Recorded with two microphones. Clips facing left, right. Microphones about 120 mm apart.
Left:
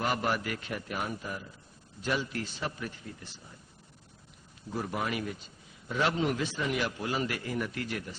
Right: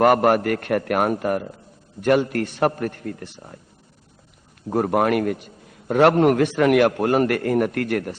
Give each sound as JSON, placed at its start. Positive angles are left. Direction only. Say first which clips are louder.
{"t": 0.0, "sound": "a man's voice", "louder": "right 14 dB", "side_deg": -60}
{"t": 4.7, "sound": "a man's voice", "louder": "right 14 dB", "side_deg": -60}